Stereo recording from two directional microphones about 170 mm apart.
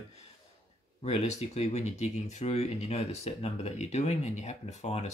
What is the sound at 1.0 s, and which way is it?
Speech, 40° left (ahead or behind).